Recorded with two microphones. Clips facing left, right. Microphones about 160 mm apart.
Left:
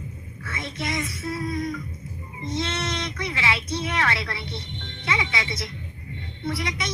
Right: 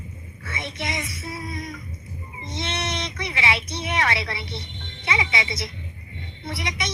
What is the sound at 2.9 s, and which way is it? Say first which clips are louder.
Speech: left 1 dB; 20° right (ahead or behind).